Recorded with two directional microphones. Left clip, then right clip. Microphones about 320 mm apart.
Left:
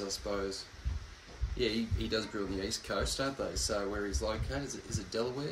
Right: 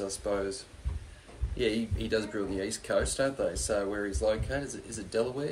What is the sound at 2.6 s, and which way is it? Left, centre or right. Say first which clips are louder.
Speech: right 7 dB; right.